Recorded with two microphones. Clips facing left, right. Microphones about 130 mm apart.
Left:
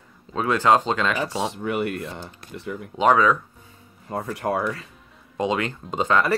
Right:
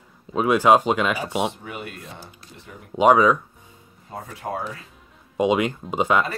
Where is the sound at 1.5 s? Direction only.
70° left (ahead or behind).